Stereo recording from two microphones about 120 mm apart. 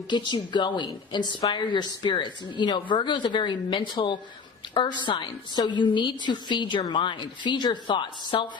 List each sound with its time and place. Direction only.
0.1 s a woman's voice: 40° left (ahead or behind)